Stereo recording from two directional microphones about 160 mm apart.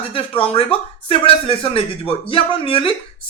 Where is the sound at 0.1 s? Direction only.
35° left (ahead or behind).